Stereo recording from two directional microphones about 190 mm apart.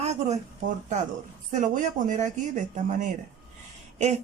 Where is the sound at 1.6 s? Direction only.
40° right (ahead or behind).